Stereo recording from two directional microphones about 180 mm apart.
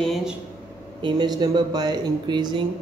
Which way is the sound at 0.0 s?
Centre (ahead or behind).